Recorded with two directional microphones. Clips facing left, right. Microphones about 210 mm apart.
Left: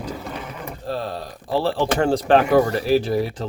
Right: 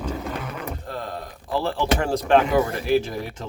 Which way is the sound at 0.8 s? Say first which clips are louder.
Left 5 dB; 30° left (ahead or behind).